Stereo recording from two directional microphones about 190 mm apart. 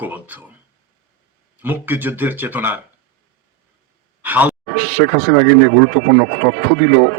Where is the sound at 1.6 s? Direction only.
10° right (ahead or behind).